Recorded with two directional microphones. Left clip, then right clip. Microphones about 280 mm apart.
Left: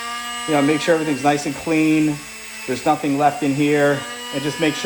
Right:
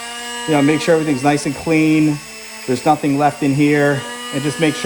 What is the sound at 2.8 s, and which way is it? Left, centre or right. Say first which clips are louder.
Speech: right 2 dB; right.